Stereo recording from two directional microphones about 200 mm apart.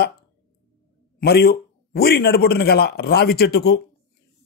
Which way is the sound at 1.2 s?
50° left (ahead or behind).